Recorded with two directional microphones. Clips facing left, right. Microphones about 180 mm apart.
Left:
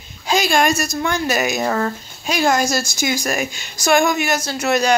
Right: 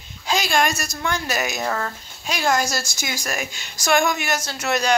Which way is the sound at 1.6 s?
25° left (ahead or behind).